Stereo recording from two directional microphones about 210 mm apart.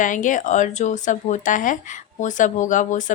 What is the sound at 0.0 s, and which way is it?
Speech, 40° left (ahead or behind).